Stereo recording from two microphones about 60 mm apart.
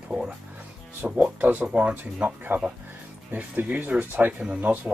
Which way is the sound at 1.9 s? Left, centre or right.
Right.